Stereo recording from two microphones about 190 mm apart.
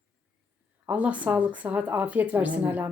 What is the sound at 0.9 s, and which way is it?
Speech, 5° right (ahead or behind).